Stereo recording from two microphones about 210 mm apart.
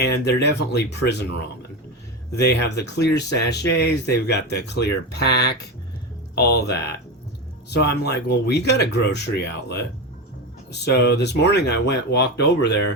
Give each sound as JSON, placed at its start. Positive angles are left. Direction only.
{"t": 0.0, "sound": "speech", "side_deg": 55}
{"t": 2.4, "sound": "speech", "side_deg": 55}